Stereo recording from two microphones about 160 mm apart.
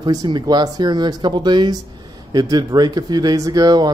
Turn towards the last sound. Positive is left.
turn(degrees=-25)  # may be behind; listen again after turning